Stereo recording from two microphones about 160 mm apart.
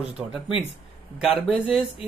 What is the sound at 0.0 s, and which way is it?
Speech, 5° right (ahead or behind).